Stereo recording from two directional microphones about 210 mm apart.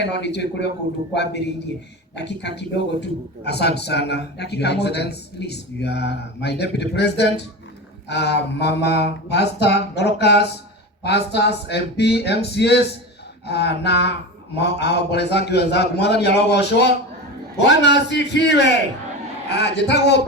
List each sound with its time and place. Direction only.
0.0 s a man's voice: 55° left (ahead or behind)